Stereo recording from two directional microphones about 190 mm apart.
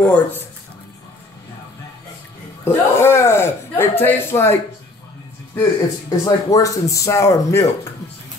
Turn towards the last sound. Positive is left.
turn(degrees=15)  # may be behind; listen again after turning